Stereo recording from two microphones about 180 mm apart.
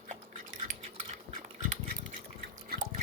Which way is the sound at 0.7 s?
45° right (ahead or behind).